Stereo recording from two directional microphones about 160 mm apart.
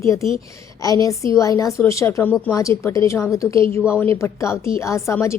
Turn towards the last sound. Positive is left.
turn(degrees=15)  # may be behind; listen again after turning